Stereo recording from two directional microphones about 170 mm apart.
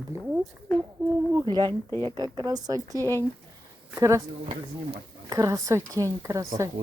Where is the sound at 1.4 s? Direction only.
25° right (ahead or behind).